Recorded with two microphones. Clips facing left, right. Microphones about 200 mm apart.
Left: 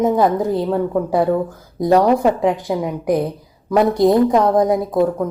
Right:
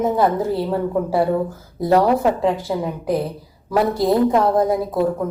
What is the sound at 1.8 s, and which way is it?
A woman's voice, 15° left (ahead or behind).